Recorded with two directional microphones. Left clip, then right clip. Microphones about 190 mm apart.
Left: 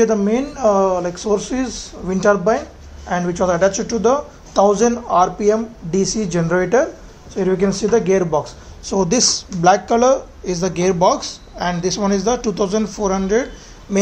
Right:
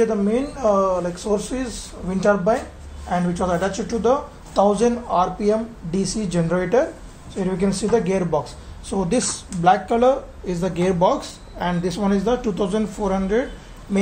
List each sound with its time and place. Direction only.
0.0 s speech: 45° left (ahead or behind)